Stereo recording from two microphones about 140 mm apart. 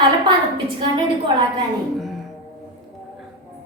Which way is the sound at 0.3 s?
35° right (ahead or behind).